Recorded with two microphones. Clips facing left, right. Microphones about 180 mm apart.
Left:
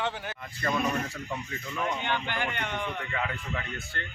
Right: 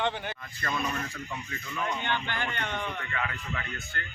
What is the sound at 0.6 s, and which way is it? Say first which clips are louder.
Speech: left 4 dB; 35° left (ahead or behind).